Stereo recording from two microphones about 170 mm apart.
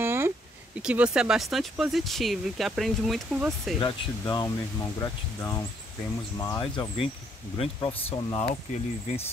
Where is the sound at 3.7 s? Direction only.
25° left (ahead or behind).